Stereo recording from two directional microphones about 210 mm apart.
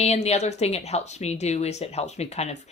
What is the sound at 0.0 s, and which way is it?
Speech, 30° left (ahead or behind).